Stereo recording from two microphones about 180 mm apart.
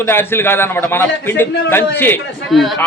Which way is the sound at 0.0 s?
15° left (ahead or behind).